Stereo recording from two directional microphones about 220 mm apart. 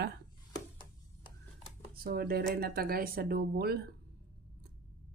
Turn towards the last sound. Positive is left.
turn(degrees=-45)  # may be behind; listen again after turning